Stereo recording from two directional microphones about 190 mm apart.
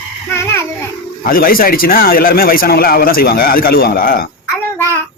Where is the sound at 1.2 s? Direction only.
50° left (ahead or behind).